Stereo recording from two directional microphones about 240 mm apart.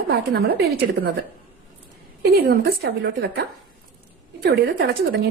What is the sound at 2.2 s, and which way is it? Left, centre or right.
A woman's voice, right.